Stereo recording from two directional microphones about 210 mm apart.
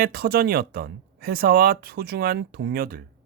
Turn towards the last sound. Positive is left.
turn(degrees=-45)  # may be behind; listen again after turning